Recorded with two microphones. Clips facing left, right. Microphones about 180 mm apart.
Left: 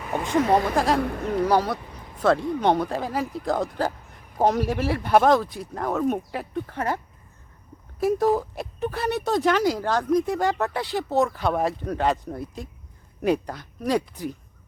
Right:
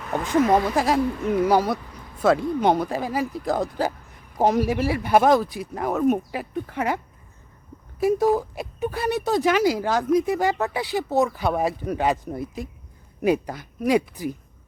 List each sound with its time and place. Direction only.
0.0 s speech: 10° left (ahead or behind)
0.9 s speech: 60° left (ahead or behind)
1.5 s speech: 10° right (ahead or behind)